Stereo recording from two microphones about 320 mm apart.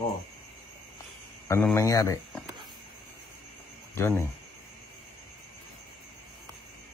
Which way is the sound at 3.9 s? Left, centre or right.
Centre.